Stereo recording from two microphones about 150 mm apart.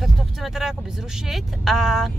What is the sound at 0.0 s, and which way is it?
Speech, centre (ahead or behind).